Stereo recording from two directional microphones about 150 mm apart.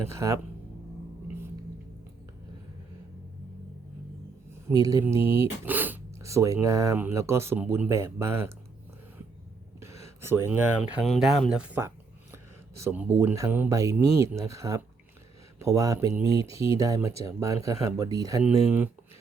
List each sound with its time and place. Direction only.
0.0 s speech: 20° right (ahead or behind)
4.7 s speech: 25° right (ahead or behind)
5.6 s speech: 10° right (ahead or behind)
9.8 s speech: 20° right (ahead or behind)
11.0 s speech: centre (ahead or behind); by 18.4 s 25° right (ahead or behind)